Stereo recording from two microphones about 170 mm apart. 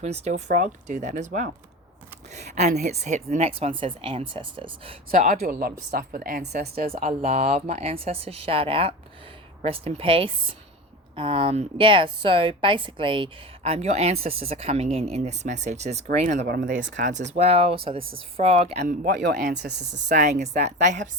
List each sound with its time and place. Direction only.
0.0 s a woman's voice: 40° right (ahead or behind)
5.1 s a woman's voice: 50° right (ahead or behind)
6.6 s a woman's voice: 65° right (ahead or behind)
6.9 s a woman's voice: 40° right (ahead or behind)
19.2 s speech: 85° right
20.1 s speech: 45° right (ahead or behind)